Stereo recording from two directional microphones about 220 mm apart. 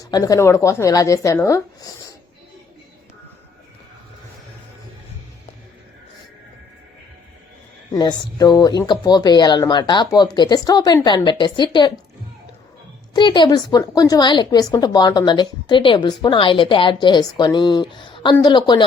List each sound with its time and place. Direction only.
0.0 s speech: 15° left (ahead or behind)
7.9 s speech: 15° left (ahead or behind)
13.1 s speech: 20° left (ahead or behind)